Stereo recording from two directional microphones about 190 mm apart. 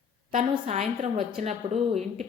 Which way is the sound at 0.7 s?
30° right (ahead or behind).